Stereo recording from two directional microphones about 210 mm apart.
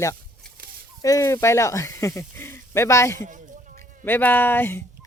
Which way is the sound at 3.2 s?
40° right (ahead or behind).